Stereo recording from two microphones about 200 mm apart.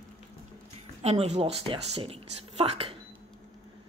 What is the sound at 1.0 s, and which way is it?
Speech, 35° right (ahead or behind).